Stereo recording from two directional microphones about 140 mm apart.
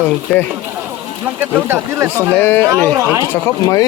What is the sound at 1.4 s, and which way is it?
Speech, 15° right (ahead or behind).